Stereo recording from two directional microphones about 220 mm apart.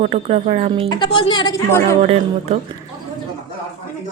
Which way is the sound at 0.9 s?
20° left (ahead or behind).